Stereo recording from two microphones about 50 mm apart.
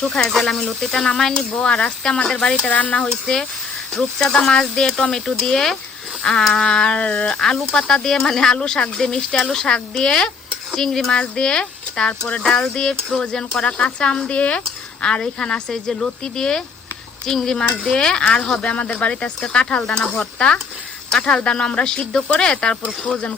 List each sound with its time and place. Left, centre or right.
0.0 s speech: centre
1.5 s speech: left
2.6 s speech: left
3.3 s speech: centre